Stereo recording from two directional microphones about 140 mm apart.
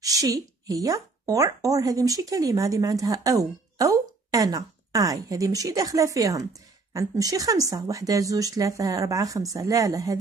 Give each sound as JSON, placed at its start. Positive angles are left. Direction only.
{"t": 0.0, "sound": "speech", "side_deg": -25}